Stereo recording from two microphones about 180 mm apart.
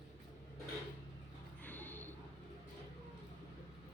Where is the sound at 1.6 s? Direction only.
10° left (ahead or behind).